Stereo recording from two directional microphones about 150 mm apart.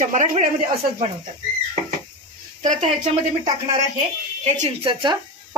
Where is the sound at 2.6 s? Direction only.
55° right (ahead or behind).